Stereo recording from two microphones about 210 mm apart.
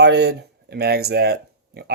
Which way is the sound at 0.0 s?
55° right (ahead or behind).